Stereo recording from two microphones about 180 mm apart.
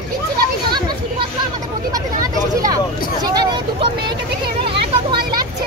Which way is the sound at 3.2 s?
20° right (ahead or behind).